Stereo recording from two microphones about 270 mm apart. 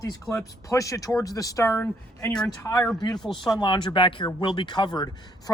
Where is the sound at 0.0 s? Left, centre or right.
Centre.